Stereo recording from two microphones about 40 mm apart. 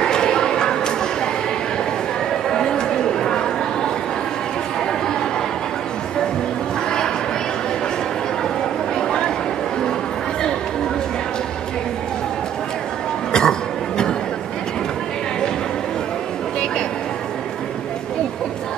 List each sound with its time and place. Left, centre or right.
0.0 s a sound: centre
2.5 s chatter: centre
8.9 s chatter: centre
13.3 s cough: centre